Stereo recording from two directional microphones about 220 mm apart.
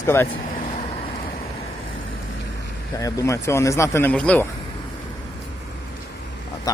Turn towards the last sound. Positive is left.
turn(degrees=15)  # may be behind; listen again after turning